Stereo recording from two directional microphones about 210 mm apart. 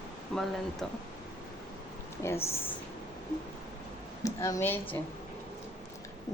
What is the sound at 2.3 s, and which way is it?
Speech, 30° left (ahead or behind).